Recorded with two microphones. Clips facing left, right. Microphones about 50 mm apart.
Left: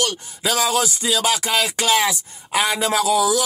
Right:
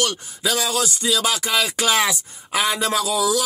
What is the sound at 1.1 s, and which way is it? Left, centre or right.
Speech, centre.